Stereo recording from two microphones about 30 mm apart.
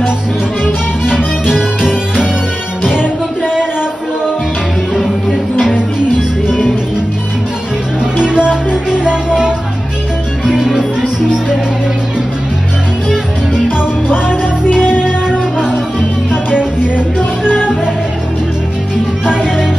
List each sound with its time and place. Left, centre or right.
1.4 s music: centre
4.9 s music: centre
5.8 s music: right
8.0 s music: right
14.7 s music: left
15.0 s music: right
19.2 s music: right